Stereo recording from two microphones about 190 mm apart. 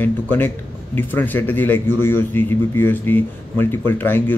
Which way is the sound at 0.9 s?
10° left (ahead or behind).